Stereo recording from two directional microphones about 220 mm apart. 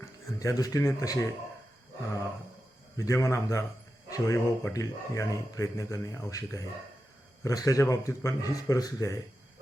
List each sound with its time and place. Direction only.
0.3 s speech: 15° left (ahead or behind)
3.0 s speech: 15° left (ahead or behind)